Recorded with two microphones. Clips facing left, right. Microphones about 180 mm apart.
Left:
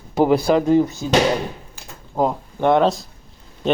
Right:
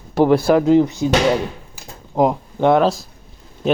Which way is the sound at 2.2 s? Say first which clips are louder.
Right 4 dB; 15° right (ahead or behind).